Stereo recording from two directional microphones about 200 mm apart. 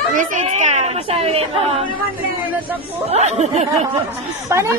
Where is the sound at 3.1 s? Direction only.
35° right (ahead or behind).